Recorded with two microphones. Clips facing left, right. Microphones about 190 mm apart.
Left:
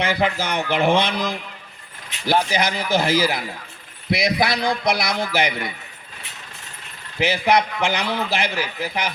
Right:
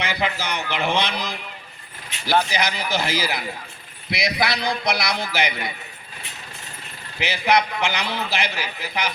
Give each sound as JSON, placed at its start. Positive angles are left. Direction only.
{"t": 0.0, "sound": "a man's voice", "side_deg": 50}
{"t": 2.1, "sound": "keys jangling", "side_deg": 0}
{"t": 2.5, "sound": "a man's voice", "side_deg": 50}
{"t": 7.2, "sound": "a man's voice", "side_deg": 50}